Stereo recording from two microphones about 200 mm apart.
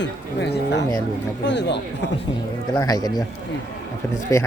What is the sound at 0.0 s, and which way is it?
Speech, 60° left (ahead or behind).